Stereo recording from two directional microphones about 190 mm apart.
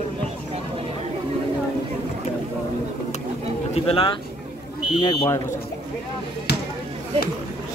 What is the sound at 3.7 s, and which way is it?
Speech, 30° left (ahead or behind).